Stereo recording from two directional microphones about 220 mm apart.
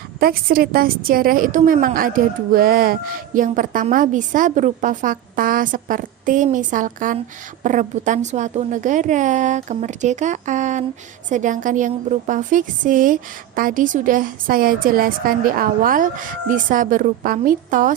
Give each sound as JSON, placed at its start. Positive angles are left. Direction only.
{"t": 0.2, "sound": "a woman's voice", "side_deg": -40}